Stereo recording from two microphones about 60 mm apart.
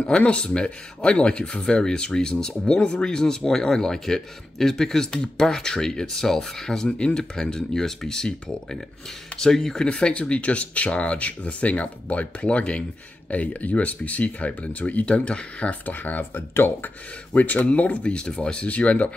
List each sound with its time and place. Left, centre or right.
0.0 s speech: left
9.4 s speech: centre
15.9 s speech: left